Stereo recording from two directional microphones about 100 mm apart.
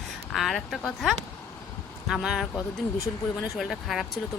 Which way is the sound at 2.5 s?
35° left (ahead or behind).